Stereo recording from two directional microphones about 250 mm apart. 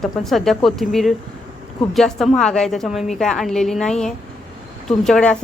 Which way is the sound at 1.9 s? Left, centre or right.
Centre.